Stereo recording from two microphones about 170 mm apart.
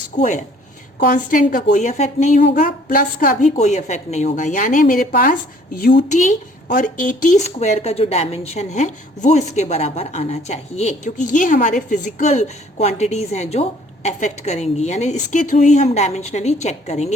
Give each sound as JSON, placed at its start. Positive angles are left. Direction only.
{"t": 0.2, "sound": "a woman's voice", "side_deg": 45}
{"t": 0.9, "sound": "a woman's voice", "side_deg": 55}